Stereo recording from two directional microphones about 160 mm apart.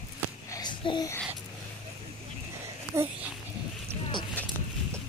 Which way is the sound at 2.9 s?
15° right (ahead or behind).